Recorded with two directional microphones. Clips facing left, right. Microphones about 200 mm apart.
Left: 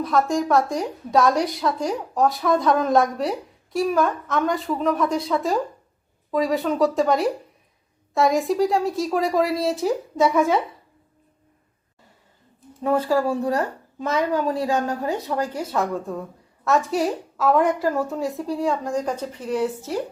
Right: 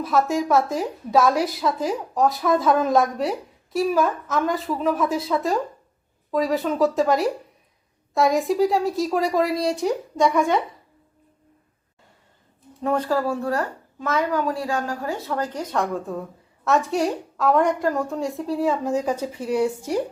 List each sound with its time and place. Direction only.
0.0 s a woman's voice: 5° right (ahead or behind)
12.8 s a woman's voice: 5° left (ahead or behind); by 20.0 s 15° right (ahead or behind)